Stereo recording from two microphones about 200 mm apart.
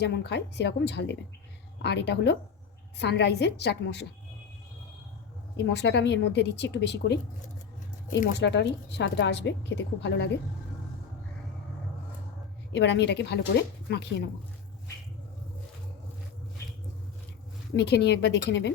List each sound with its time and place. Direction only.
0.0 s a woman's voice: 60° left (ahead or behind)
5.5 s a woman's voice: 60° left (ahead or behind)
8.2 s a woman's voice: 60° left (ahead or behind)
12.7 s a woman's voice: 60° left (ahead or behind)
17.7 s a woman's voice: 55° left (ahead or behind)